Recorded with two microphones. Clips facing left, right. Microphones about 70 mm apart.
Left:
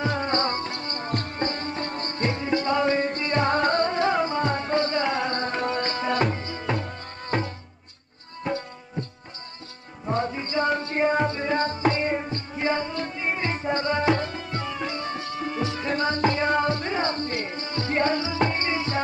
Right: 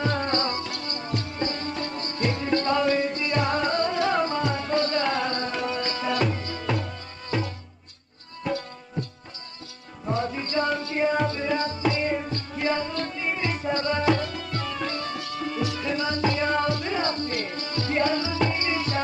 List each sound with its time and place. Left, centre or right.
0.0 s music: centre
0.3 s music: left
2.4 s music: centre
2.8 s music: left
4.1 s music: centre
4.4 s music: left
10.3 s music: left